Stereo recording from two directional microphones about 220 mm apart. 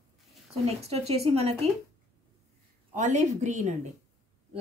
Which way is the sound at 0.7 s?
30° right (ahead or behind).